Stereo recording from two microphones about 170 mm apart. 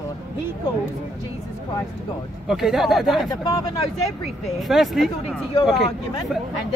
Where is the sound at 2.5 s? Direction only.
Centre (ahead or behind).